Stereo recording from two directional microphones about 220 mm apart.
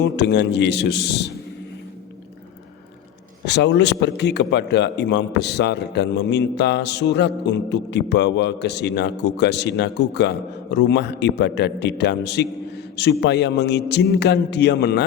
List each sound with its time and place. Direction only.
0.0 s a man's voice: 50° left (ahead or behind)
3.4 s a man's voice: 50° left (ahead or behind)